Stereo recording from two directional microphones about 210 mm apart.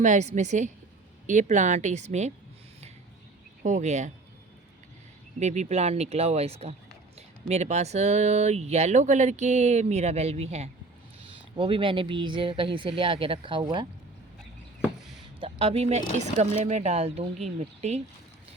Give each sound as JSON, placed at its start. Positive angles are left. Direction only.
{"t": 0.0, "sound": "speech", "side_deg": -35}
{"t": 3.6, "sound": "speech", "side_deg": -35}
{"t": 5.4, "sound": "speech", "side_deg": -35}
{"t": 15.4, "sound": "speech", "side_deg": -30}